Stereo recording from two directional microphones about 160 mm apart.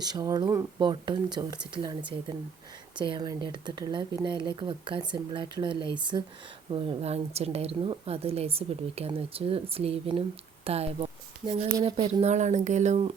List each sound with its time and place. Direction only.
0.0 s speech: 25° right (ahead or behind)
3.0 s a woman's voice: 25° right (ahead or behind)
12.2 s speech: 45° right (ahead or behind)